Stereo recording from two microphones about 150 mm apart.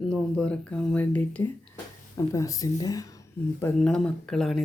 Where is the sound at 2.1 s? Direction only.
20° left (ahead or behind).